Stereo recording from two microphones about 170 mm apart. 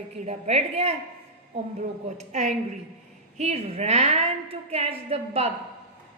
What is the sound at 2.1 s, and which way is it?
A woman's voice, 45° right (ahead or behind).